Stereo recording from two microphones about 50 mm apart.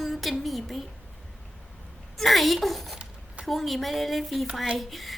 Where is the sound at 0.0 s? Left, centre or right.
Centre.